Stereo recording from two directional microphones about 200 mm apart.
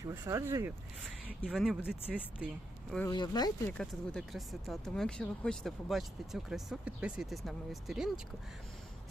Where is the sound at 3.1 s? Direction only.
20° left (ahead or behind).